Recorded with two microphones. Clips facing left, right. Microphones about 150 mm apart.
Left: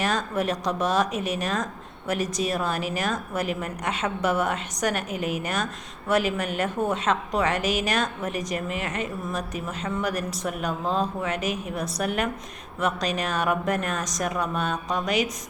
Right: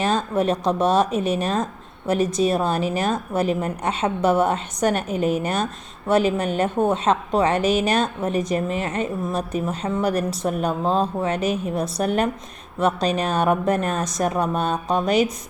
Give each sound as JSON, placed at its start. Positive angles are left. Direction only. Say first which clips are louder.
{"t": 0.0, "sound": "a woman's voice", "louder": "right 5 dB", "side_deg": -25}